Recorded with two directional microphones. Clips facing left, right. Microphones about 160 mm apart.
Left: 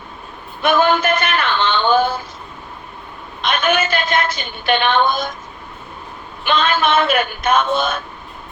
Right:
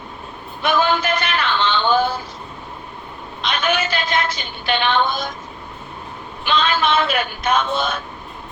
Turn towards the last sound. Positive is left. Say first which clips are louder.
# left 3 dB
turn(degrees=50)  # may be behind; listen again after turning